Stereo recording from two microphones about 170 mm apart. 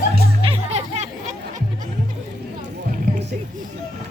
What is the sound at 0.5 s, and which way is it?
Music, 40° right (ahead or behind).